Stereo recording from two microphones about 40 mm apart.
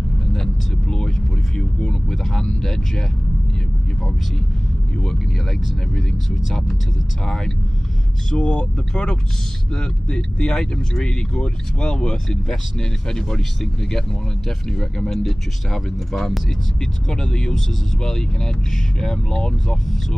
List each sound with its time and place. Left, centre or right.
0.3 s vehicle: centre
1.9 s speech: centre
7.2 s speech: centre
8.3 s speech: left; by 16.3 s centre
16.8 s speech: centre